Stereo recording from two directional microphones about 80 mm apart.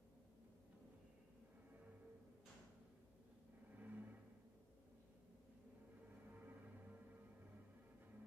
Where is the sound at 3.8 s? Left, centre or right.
Right.